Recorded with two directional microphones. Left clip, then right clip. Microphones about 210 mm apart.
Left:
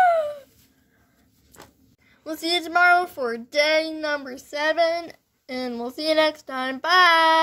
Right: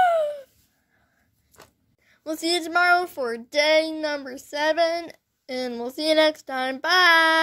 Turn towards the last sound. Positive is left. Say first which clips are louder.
# left 1 dB
turn(degrees=-40)  # may be behind; listen again after turning